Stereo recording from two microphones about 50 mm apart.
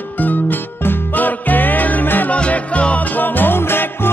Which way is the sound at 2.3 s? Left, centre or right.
Left.